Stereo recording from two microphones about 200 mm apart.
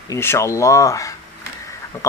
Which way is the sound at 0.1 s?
15° left (ahead or behind).